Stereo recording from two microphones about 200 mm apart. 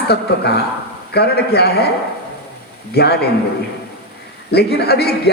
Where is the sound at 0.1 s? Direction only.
55° left (ahead or behind).